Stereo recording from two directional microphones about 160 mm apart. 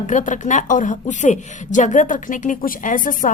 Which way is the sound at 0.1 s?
50° left (ahead or behind).